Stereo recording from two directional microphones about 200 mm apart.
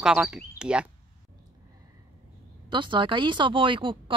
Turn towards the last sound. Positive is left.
turn(degrees=-25)  # may be behind; listen again after turning